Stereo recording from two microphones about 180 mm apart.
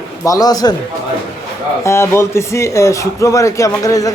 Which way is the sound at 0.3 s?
20° left (ahead or behind).